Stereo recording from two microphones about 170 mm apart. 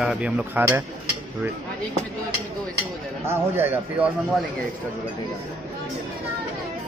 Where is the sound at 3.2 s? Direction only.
15° right (ahead or behind).